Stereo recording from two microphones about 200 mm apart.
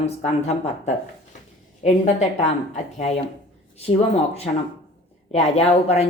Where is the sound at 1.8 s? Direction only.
35° left (ahead or behind).